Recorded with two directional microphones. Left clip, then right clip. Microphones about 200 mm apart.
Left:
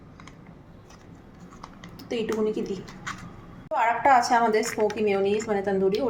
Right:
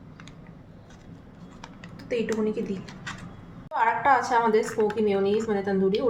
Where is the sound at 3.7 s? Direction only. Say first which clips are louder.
Left 2 dB; 20° left (ahead or behind).